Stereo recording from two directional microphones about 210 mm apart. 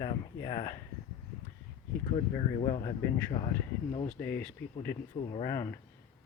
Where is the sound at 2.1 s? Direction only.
25° left (ahead or behind).